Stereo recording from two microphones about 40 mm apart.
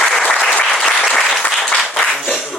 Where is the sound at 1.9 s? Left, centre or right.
Centre.